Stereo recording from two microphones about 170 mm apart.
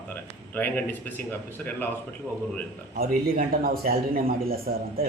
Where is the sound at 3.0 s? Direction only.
60° right (ahead or behind).